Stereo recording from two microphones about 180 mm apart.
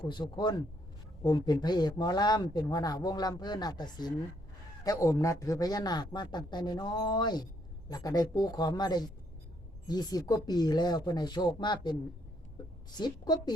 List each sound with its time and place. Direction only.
0.1 s speech: 25° left (ahead or behind)